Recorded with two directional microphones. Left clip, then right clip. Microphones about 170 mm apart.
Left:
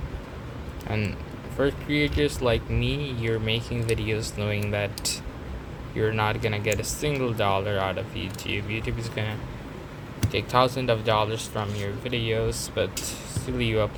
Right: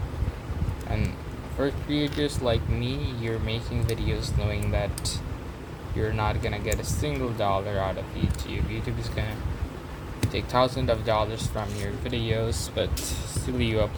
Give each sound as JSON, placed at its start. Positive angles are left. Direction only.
{"t": 1.5, "sound": "speech", "side_deg": 15}
{"t": 10.3, "sound": "speech", "side_deg": 15}